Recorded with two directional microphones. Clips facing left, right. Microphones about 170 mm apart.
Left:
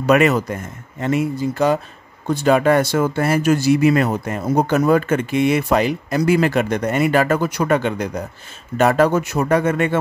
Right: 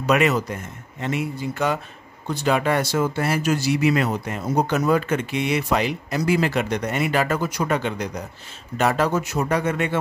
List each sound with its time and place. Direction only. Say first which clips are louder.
0.0 s speech: left 5 dB; 50° left (ahead or behind); by 1.8 s 35° left (ahead or behind)
2.2 s speech: left 6 dB; 50° left (ahead or behind)